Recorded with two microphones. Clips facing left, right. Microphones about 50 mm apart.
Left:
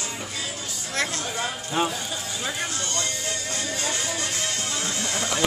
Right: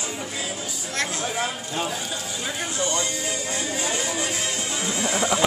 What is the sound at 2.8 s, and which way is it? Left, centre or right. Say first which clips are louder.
Music: right 4 dB; centre.